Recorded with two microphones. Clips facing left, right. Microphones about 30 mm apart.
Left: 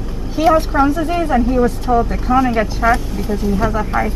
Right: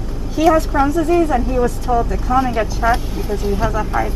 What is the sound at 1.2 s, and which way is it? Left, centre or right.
Speech, centre.